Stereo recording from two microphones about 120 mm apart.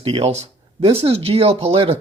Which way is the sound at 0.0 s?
55° right (ahead or behind).